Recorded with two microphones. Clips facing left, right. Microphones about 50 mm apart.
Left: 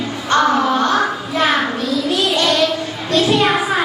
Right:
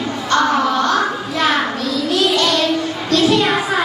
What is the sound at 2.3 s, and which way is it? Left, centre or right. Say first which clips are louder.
Child singing: even; left.